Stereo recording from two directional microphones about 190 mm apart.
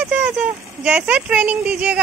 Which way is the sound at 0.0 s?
5° right (ahead or behind).